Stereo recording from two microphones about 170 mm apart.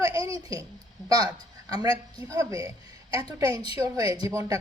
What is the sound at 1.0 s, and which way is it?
A woman's voice, 20° right (ahead or behind).